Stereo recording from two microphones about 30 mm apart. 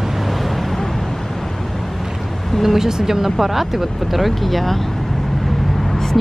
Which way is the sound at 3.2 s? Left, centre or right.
Centre.